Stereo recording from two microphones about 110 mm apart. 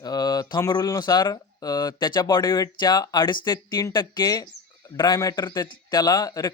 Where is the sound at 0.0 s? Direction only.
35° left (ahead or behind).